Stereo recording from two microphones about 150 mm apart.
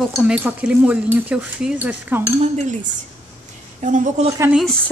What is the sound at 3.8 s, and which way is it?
Speech, 55° right (ahead or behind).